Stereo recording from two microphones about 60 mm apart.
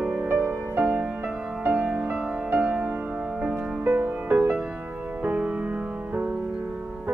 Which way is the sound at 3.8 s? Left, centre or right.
Right.